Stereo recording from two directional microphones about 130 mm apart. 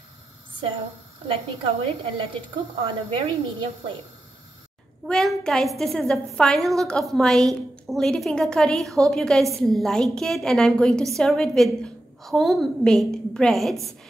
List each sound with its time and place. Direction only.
1.2 s a woman's voice: 45° right (ahead or behind)
5.0 s a woman's voice: 5° left (ahead or behind)